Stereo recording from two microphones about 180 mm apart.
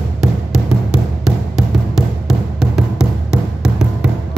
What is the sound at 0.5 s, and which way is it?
Music, 5° right (ahead or behind).